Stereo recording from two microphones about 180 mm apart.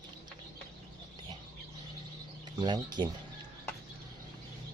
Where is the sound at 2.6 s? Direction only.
25° right (ahead or behind).